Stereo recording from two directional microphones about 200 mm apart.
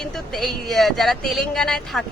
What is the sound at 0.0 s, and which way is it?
Speech, centre (ahead or behind).